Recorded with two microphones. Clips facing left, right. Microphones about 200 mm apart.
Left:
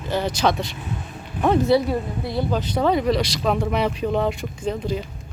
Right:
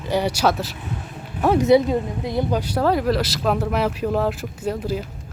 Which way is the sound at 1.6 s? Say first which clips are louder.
Right 3 dB; 20° right (ahead or behind).